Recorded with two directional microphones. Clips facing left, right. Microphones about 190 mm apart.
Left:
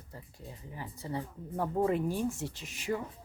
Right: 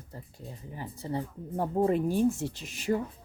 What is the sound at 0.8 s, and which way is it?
Speech, 30° right (ahead or behind).